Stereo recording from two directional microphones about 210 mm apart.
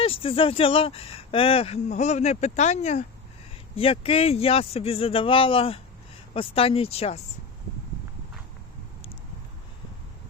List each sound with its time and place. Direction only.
0.0 s speech: 25° left (ahead or behind)